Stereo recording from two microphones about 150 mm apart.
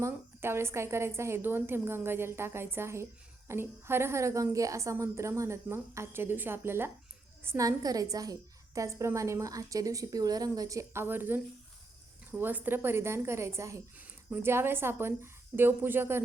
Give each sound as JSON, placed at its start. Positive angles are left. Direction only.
{"t": 0.0, "sound": "a woman's voice", "side_deg": -15}